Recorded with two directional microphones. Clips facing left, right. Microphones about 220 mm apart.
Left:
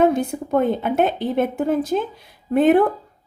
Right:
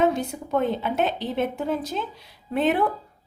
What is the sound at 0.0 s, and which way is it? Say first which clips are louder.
A woman's voice: left 5 dB; 50° left (ahead or behind).